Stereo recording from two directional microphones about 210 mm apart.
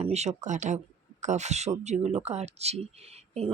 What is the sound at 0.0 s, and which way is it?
Speech, 30° right (ahead or behind).